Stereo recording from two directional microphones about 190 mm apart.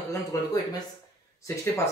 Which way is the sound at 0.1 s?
15° left (ahead or behind).